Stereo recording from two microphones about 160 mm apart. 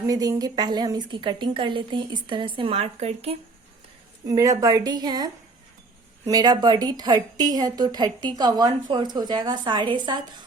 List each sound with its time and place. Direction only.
0.0 s a woman's voice: 20° right (ahead or behind); by 3.3 s 40° right (ahead or behind)
4.3 s a woman's voice: 20° right (ahead or behind)